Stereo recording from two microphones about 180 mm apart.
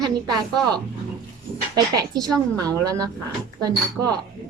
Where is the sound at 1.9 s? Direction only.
20° right (ahead or behind).